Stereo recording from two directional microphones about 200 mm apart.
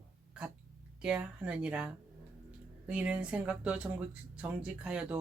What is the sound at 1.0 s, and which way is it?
Speech, 5° right (ahead or behind).